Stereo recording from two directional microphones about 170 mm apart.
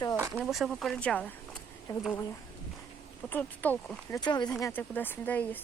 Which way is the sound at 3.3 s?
10° left (ahead or behind).